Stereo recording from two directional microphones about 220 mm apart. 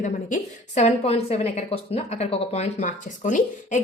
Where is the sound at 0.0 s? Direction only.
35° left (ahead or behind).